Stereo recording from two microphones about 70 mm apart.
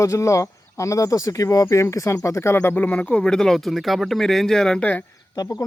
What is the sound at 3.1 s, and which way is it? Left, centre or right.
Speech, centre.